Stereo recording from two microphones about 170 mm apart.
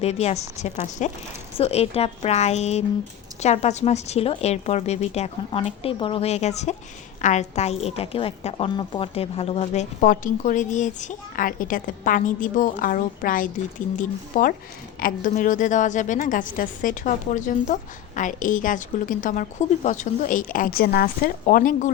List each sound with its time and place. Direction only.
0.0 s a woman's voice: 40° left (ahead or behind)